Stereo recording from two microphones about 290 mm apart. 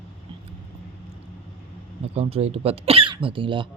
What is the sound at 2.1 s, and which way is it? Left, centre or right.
Speech, centre.